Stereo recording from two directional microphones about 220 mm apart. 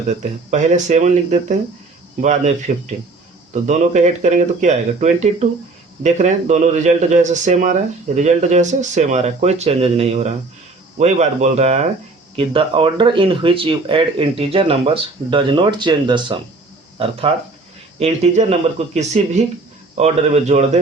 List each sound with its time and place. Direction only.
0.5 s speech: 30° right (ahead or behind)